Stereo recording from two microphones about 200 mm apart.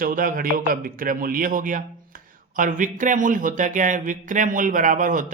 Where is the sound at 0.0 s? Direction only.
45° right (ahead or behind).